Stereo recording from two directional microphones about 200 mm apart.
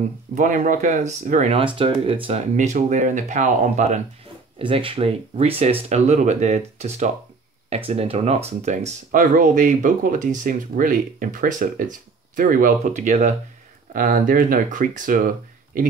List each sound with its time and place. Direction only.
0.3 s speech: 40° right (ahead or behind)
4.6 s speech: 25° right (ahead or behind); by 15.9 s 45° right (ahead or behind)